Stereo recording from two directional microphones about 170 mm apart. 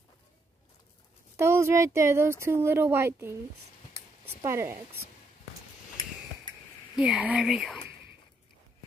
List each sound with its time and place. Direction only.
1.3 s speech: 15° right (ahead or behind)
4.4 s speech: 15° right (ahead or behind)
7.0 s speech: 5° right (ahead or behind)